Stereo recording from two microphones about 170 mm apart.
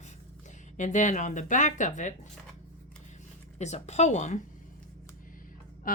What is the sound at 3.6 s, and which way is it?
Speech, 40° left (ahead or behind).